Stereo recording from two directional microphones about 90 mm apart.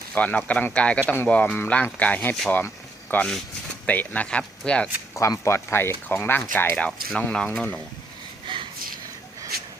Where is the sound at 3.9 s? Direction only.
15° left (ahead or behind).